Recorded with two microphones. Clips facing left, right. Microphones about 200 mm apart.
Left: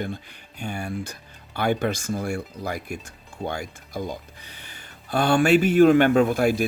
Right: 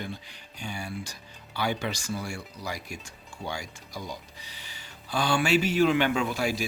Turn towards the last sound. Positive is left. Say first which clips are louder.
# left 9 dB
turn(degrees=55)  # may be behind; listen again after turning